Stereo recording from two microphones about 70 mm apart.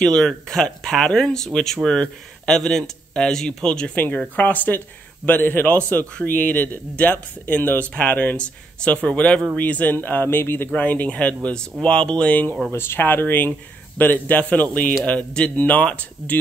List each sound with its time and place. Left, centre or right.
0.0 s speech: centre
3.9 s a man's voice: left
10.7 s a man's voice: left
12.7 s a man's voice: left